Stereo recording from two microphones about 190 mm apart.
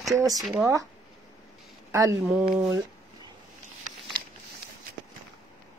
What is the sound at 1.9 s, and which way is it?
Speech, 15° right (ahead or behind).